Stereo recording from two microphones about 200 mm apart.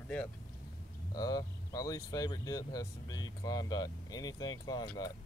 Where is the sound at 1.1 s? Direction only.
20° left (ahead or behind).